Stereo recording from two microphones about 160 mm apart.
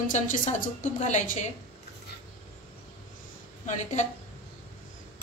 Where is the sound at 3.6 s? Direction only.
50° left (ahead or behind).